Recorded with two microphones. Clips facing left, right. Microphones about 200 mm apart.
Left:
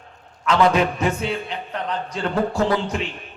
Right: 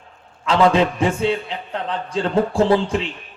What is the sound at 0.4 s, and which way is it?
A man's voice, 30° right (ahead or behind).